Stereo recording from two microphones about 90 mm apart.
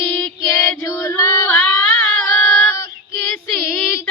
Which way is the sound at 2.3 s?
30° left (ahead or behind).